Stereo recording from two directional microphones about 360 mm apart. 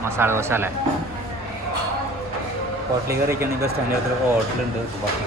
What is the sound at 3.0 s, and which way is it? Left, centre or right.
Speech, centre.